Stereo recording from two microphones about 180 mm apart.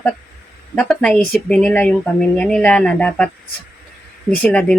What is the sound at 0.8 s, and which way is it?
Speech, 5° left (ahead or behind).